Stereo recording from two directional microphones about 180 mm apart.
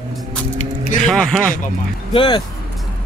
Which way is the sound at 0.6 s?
45° left (ahead or behind).